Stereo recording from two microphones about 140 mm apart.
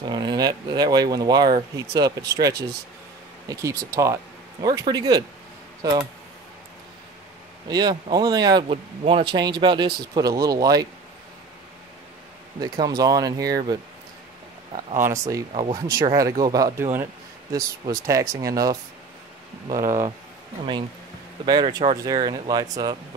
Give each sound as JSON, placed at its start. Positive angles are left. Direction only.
{"t": 0.0, "sound": "speech", "side_deg": -30}
{"t": 7.6, "sound": "speech", "side_deg": -30}
{"t": 9.0, "sound": "speech", "side_deg": -40}
{"t": 9.4, "sound": "speech", "side_deg": -30}
{"t": 12.5, "sound": "speech", "side_deg": -30}
{"t": 15.0, "sound": "speech", "side_deg": -20}
{"t": 21.5, "sound": "speech", "side_deg": -30}